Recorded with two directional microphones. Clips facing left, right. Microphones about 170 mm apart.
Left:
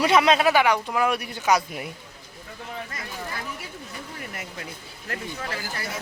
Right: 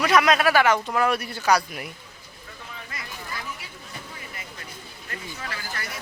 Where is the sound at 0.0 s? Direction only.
25° left (ahead or behind).